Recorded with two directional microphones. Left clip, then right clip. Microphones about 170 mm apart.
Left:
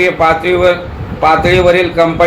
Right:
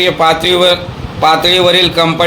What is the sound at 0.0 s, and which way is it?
A man's voice, 45° right (ahead or behind).